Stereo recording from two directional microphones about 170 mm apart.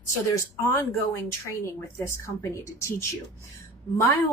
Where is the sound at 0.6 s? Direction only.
15° left (ahead or behind).